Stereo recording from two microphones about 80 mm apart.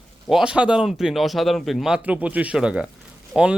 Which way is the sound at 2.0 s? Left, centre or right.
Centre.